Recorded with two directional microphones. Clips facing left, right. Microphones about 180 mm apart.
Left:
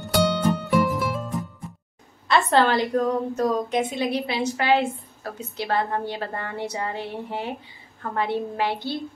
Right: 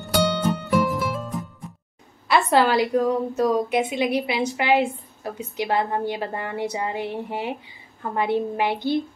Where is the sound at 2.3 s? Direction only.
10° right (ahead or behind).